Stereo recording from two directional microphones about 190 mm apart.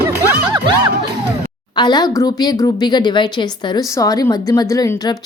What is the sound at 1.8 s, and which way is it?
A woman's voice, 20° left (ahead or behind).